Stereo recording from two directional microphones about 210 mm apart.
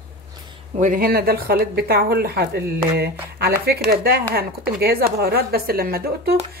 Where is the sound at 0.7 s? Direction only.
40° right (ahead or behind).